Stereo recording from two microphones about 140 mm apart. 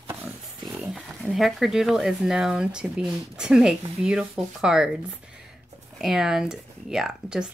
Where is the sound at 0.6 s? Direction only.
Centre (ahead or behind).